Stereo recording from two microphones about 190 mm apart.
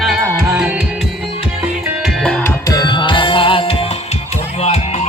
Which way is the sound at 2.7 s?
20° left (ahead or behind).